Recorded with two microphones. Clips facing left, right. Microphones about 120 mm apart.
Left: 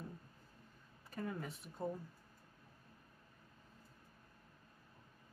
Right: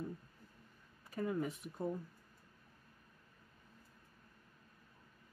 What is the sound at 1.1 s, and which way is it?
Speech, 5° right (ahead or behind).